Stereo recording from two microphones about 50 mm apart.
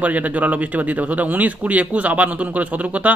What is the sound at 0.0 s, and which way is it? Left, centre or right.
Speech, right.